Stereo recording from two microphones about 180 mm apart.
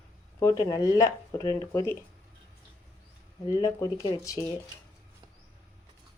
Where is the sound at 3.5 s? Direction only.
20° left (ahead or behind).